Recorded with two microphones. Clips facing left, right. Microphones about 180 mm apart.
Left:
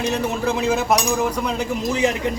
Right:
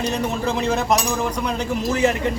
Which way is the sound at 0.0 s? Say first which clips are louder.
Left 1 dB; 10° left (ahead or behind).